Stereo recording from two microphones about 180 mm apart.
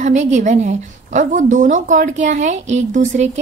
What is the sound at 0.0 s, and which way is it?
A woman's voice, 40° right (ahead or behind).